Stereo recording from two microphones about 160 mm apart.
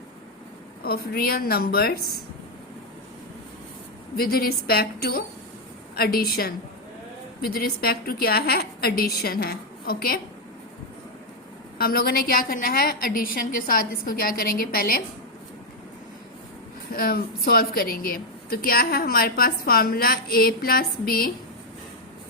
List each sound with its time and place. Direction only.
0.8 s a woman's voice: 70° left (ahead or behind)
4.2 s a woman's voice: 70° left (ahead or behind)
11.8 s a woman's voice: 70° left (ahead or behind)
16.9 s a woman's voice: 65° left (ahead or behind)